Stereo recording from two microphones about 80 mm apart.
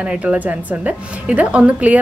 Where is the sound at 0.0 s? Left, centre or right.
Centre.